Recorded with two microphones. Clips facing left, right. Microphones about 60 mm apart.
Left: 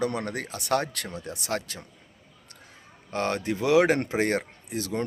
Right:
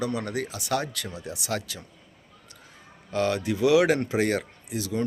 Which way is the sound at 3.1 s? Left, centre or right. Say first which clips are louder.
Right 2 dB; left.